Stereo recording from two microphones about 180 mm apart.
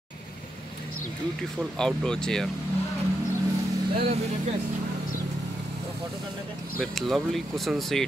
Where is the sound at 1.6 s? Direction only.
5° left (ahead or behind).